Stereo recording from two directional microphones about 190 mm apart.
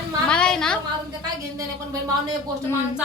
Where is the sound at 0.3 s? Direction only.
5° left (ahead or behind).